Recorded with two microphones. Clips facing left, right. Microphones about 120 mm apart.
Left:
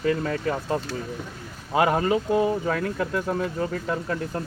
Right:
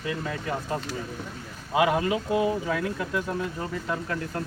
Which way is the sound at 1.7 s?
45° left (ahead or behind).